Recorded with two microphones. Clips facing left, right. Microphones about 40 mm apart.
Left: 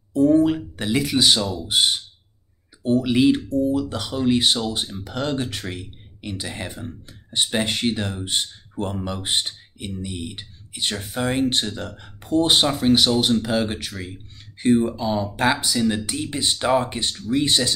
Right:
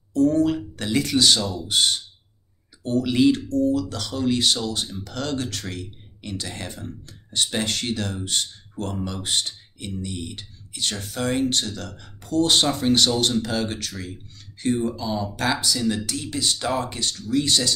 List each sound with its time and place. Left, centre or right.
0.1 s speech: centre